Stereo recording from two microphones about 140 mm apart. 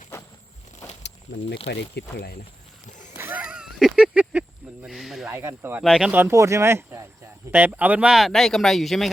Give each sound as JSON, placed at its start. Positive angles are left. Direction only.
{"t": 1.3, "sound": "speech", "side_deg": 25}
{"t": 3.2, "sound": "a sound", "side_deg": -15}
{"t": 5.3, "sound": "speech", "side_deg": -15}
{"t": 5.8, "sound": "speech", "side_deg": -5}